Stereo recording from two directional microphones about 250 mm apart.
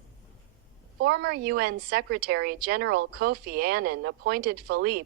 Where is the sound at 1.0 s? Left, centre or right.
Right.